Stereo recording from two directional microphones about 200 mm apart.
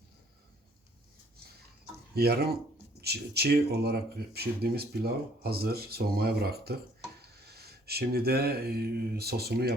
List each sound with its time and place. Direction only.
2.1 s speech: 55° right (ahead or behind)
7.2 s a sound: 50° right (ahead or behind)
9.1 s speech: 50° right (ahead or behind)